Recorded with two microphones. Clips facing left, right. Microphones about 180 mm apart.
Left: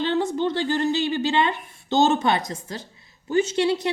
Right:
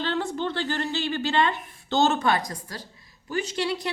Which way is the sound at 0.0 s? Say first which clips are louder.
Left 5 dB; 20° left (ahead or behind).